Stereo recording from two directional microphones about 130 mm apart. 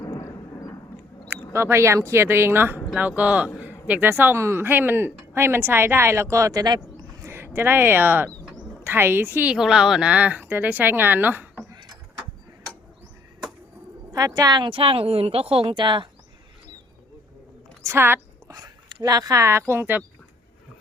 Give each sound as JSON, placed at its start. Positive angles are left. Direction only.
{"t": 0.0, "sound": "vehicle", "side_deg": 25}
{"t": 1.5, "sound": "speech", "side_deg": -20}
{"t": 7.3, "sound": "speech", "side_deg": -20}
{"t": 14.1, "sound": "speech", "side_deg": -30}
{"t": 17.8, "sound": "a sound", "side_deg": -20}
{"t": 18.5, "sound": "speech", "side_deg": -30}